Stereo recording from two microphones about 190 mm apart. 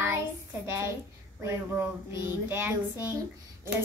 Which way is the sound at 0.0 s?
10° right (ahead or behind).